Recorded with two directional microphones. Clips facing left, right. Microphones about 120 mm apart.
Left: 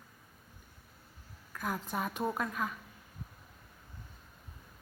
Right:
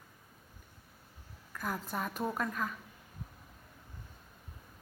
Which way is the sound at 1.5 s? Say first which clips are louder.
Left 1 dB; centre (ahead or behind).